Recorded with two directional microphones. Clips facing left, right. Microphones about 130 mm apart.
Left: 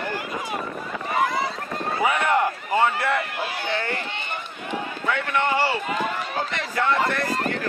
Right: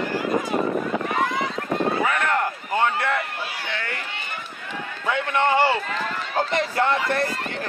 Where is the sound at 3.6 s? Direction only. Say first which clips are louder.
Left 6 dB; 35° left (ahead or behind).